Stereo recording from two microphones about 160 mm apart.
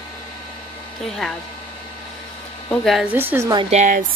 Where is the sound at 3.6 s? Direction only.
50° right (ahead or behind).